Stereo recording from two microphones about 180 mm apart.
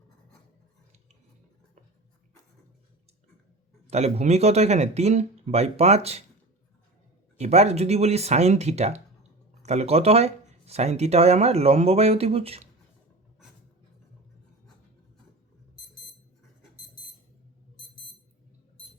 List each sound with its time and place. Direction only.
3.8 s speech: 35° right (ahead or behind)
7.3 s speech: 35° right (ahead or behind)